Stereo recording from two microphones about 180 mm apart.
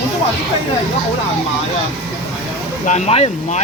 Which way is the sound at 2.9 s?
35° left (ahead or behind).